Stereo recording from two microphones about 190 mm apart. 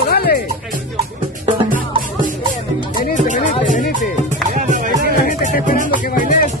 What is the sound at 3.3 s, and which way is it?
Music, 45° left (ahead or behind).